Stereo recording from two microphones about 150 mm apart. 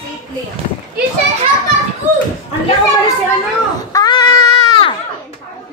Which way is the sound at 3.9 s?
25° left (ahead or behind).